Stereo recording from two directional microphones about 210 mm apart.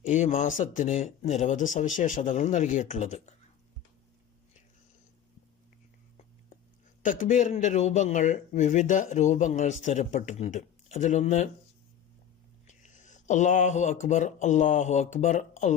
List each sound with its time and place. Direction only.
0.0 s a man's voice: 35° left (ahead or behind)
7.0 s a man's voice: 40° left (ahead or behind)
12.6 s speech: 35° left (ahead or behind)